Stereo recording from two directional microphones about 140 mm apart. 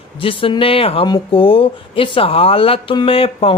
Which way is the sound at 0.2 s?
40° left (ahead or behind).